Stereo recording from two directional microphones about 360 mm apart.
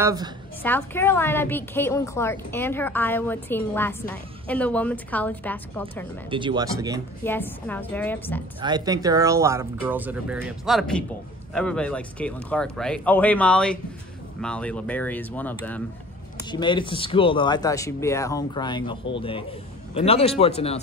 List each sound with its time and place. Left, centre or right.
0.0 s speech: centre
0.6 s a woman's voice: centre
6.3 s speech: centre
7.2 s a woman's voice: centre
8.5 s a woman's voice: centre